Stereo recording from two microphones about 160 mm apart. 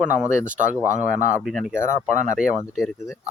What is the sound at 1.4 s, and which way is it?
Speech, centre (ahead or behind).